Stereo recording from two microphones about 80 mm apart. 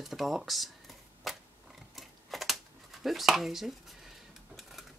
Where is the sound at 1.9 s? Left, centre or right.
Centre.